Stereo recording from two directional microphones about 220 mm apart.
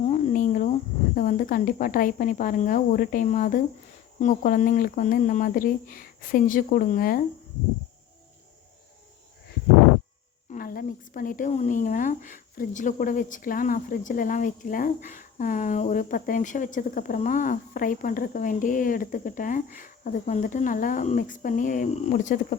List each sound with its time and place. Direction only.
0.1 s cricket: 35° left (ahead or behind)
1.1 s speech: 35° left (ahead or behind)
10.5 s speech: 40° left (ahead or behind)